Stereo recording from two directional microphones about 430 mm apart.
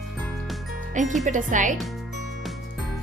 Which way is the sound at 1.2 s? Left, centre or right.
Centre.